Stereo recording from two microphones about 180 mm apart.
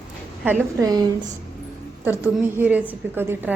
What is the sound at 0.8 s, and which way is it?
Speech, 20° right (ahead or behind).